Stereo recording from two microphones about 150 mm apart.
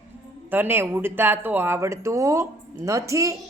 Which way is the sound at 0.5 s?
15° right (ahead or behind).